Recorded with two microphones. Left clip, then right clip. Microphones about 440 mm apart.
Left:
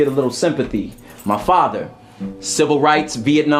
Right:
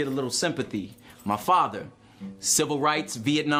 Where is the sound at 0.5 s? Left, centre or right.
Right.